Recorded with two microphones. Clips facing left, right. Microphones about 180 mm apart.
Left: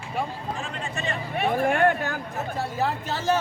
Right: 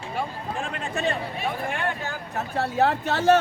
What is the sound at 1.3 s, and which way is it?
Speech, 50° left (ahead or behind).